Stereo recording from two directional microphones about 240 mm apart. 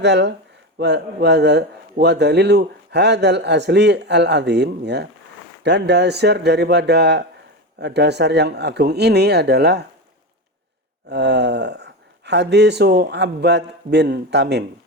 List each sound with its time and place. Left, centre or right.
0.0 s speech: right
11.1 s speech: right